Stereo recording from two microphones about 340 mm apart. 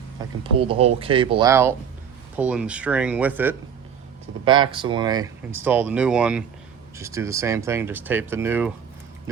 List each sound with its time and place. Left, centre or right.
0.2 s speech: centre